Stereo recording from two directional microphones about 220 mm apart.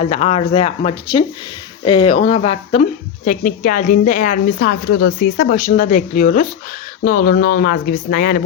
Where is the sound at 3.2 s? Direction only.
40° left (ahead or behind).